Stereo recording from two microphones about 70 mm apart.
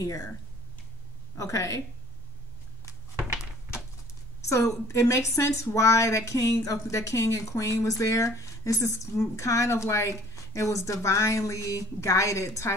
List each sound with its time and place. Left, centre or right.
0.0 s speech: left
1.3 s speech: left
4.4 s speech: left